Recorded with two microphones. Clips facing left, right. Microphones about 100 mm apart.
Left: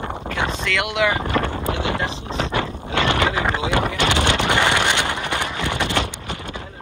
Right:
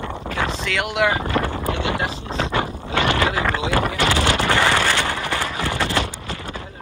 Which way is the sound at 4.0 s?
20° left (ahead or behind).